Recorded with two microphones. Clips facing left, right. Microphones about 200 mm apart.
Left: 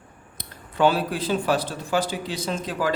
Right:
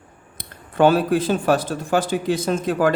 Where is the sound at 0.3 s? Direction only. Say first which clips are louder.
Right 6 dB; 50° right (ahead or behind).